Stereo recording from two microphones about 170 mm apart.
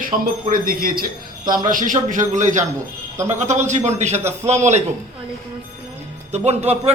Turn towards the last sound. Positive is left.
turn(degrees=-40)  # may be behind; listen again after turning